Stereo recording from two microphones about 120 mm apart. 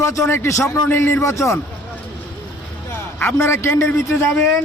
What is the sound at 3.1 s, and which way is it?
A man's voice, 15° left (ahead or behind).